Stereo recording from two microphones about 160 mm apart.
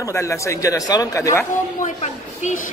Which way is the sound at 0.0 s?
20° left (ahead or behind).